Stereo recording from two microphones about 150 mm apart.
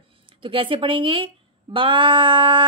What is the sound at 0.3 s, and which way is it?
Child singing, 35° right (ahead or behind).